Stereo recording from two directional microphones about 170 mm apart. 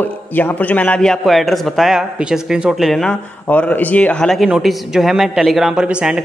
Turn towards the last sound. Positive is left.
turn(degrees=-5)  # may be behind; listen again after turning